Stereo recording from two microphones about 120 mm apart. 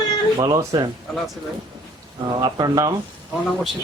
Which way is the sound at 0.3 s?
35° right (ahead or behind).